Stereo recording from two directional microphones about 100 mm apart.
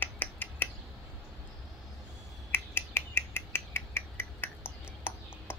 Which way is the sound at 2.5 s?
25° left (ahead or behind).